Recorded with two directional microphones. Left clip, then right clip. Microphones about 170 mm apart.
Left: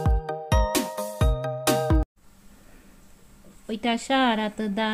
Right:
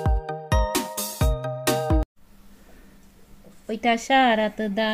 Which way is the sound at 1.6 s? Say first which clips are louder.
Even; centre (ahead or behind).